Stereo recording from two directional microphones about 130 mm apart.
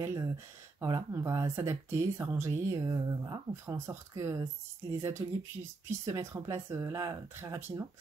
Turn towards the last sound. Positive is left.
turn(degrees=-20)  # may be behind; listen again after turning